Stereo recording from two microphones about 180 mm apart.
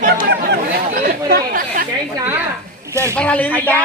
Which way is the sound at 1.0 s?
55° right (ahead or behind).